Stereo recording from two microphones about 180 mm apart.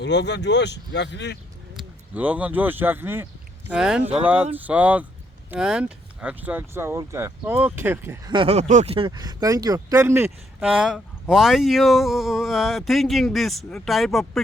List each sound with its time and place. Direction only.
0.0 s speech: 75° left (ahead or behind)
1.7 s speech: 10° right (ahead or behind)
8.3 s speech: 30° right (ahead or behind); by 14.4 s centre (ahead or behind)